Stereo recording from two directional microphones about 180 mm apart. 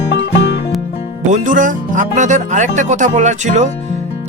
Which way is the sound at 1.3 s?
45° right (ahead or behind).